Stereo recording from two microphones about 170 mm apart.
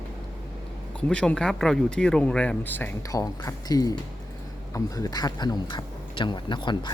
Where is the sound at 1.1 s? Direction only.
5° left (ahead or behind).